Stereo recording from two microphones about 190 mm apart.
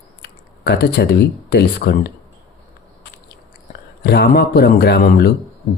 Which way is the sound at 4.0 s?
55° left (ahead or behind).